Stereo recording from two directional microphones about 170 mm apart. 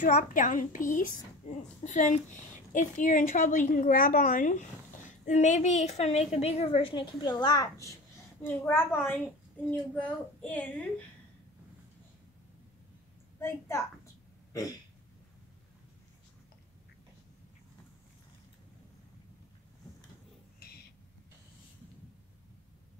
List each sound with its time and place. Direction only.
0.0 s a woman's voice: 50° left (ahead or behind); by 10.9 s 10° left (ahead or behind)
13.4 s a child's voice: 15° left (ahead or behind)
14.5 s throat clearing: 20° left (ahead or behind)
20.5 s owl: 65° left (ahead or behind)